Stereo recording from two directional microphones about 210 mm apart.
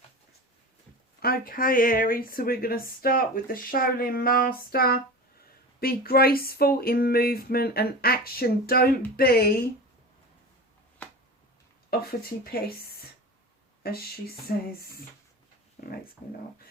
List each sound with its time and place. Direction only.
1.2 s speech: 45° left (ahead or behind)
11.9 s speech: 45° left (ahead or behind)